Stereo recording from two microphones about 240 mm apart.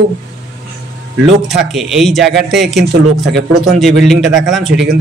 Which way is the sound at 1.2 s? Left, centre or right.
Centre.